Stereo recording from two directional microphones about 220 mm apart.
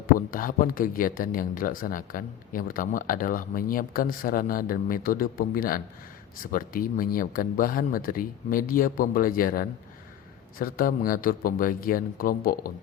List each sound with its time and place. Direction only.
0.2 s speech: 40° left (ahead or behind)